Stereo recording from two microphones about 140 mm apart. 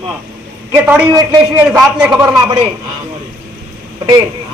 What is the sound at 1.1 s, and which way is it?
Speech, 30° right (ahead or behind).